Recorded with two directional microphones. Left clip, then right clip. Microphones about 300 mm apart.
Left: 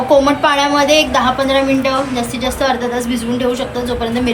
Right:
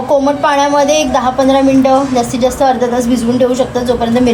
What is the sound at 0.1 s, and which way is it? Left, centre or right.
A woman's voice, right.